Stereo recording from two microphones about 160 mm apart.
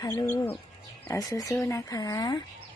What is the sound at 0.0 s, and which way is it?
Speech, 20° left (ahead or behind).